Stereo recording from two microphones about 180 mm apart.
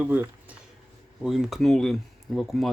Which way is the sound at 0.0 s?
10° right (ahead or behind).